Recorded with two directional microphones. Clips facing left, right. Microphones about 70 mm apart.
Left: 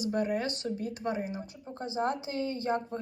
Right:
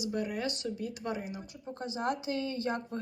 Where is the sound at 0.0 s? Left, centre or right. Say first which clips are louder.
Left 4 dB; left.